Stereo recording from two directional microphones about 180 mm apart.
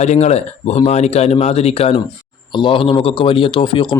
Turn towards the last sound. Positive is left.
turn(degrees=25)  # may be behind; listen again after turning